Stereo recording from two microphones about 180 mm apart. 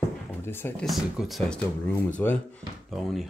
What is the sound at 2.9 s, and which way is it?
Speech, centre (ahead or behind).